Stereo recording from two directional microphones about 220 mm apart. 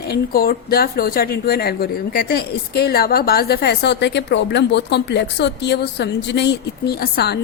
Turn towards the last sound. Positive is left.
turn(degrees=45)  # may be behind; listen again after turning